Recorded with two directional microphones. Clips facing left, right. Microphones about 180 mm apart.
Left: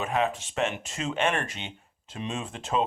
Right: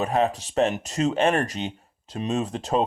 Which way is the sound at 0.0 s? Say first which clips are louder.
Right 4 dB; 35° right (ahead or behind).